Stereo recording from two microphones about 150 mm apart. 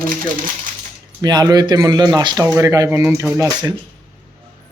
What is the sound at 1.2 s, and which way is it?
Speech, 25° right (ahead or behind).